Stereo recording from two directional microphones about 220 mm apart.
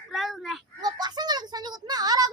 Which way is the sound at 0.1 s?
Centre (ahead or behind).